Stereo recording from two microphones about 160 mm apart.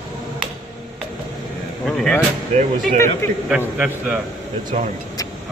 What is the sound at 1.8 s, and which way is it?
Speech, 5° left (ahead or behind).